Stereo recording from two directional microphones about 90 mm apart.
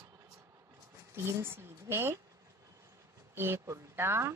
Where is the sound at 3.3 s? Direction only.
25° right (ahead or behind).